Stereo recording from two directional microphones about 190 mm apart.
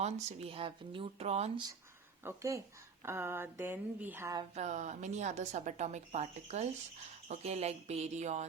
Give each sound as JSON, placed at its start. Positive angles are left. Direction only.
{"t": 0.0, "sound": "speech", "side_deg": -35}
{"t": 2.2, "sound": "speech", "side_deg": -15}
{"t": 4.5, "sound": "speech", "side_deg": -40}